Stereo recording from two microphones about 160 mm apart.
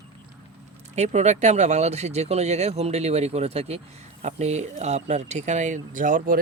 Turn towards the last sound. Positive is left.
turn(degrees=-60)  # may be behind; listen again after turning